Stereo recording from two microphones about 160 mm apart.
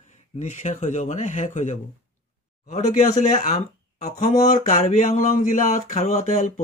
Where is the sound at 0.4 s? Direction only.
45° left (ahead or behind).